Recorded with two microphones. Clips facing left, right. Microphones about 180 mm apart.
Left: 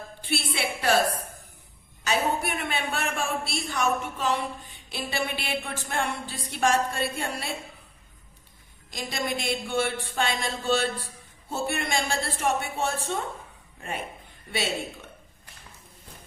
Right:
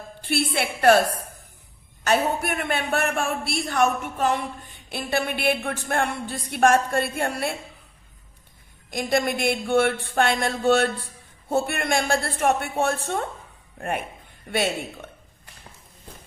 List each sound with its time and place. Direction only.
0.3 s a woman's voice: 55° right (ahead or behind)
2.0 s a man's voice: 55° right (ahead or behind)
8.9 s a man's voice: 55° right (ahead or behind)